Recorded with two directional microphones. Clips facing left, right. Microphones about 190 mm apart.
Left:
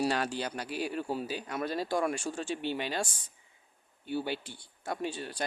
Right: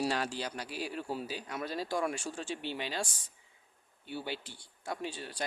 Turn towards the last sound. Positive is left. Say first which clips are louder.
# left 3 dB
turn(degrees=50)  # may be behind; listen again after turning